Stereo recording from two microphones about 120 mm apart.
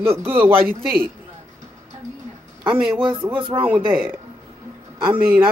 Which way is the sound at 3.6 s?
15° right (ahead or behind).